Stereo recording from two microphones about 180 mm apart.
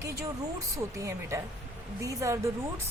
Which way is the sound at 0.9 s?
15° right (ahead or behind).